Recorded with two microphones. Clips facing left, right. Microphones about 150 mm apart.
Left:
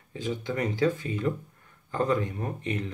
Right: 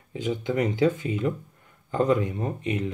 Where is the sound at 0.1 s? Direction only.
15° right (ahead or behind).